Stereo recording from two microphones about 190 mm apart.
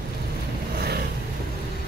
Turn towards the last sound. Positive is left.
turn(degrees=-55)  # may be behind; listen again after turning